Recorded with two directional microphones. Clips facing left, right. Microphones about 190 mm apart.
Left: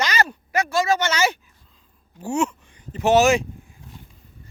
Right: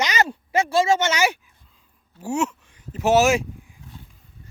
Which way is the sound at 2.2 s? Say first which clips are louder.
Left 1 dB; 5° right (ahead or behind).